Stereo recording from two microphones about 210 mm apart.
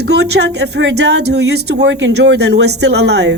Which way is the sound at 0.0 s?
55° right (ahead or behind).